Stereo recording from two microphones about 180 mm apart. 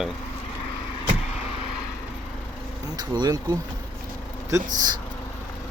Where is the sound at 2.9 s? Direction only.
25° right (ahead or behind).